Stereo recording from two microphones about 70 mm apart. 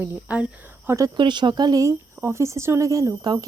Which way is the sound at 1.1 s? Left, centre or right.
Right.